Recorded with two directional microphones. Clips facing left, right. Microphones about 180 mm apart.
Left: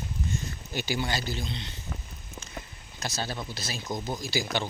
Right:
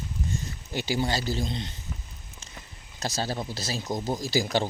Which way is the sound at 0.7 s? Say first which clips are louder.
Right 3 dB; 30° right (ahead or behind).